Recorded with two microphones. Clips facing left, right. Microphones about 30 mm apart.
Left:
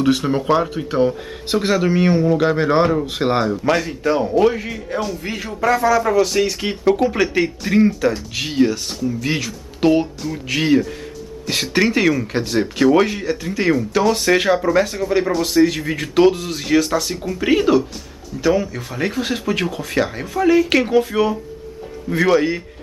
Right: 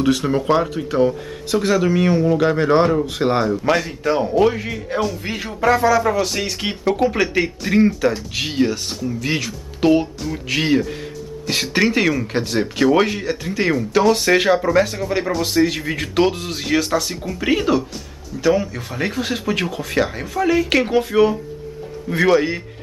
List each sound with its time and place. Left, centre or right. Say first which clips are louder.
0.0 s a man's voice: even; centre